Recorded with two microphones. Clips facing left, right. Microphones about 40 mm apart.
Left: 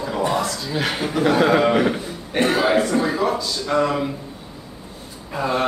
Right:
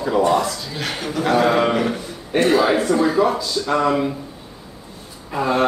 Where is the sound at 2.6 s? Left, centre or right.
Centre.